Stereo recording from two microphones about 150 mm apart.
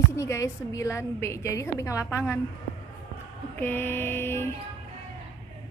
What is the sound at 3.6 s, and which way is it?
Speech, 15° left (ahead or behind).